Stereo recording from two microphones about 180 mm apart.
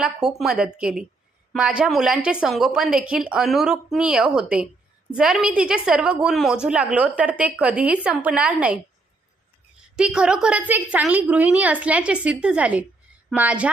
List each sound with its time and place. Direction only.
0.0 s a woman's voice: 5° right (ahead or behind)
9.9 s a woman's voice: 5° right (ahead or behind)